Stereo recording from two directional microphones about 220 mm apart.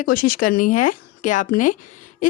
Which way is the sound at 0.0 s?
40° left (ahead or behind).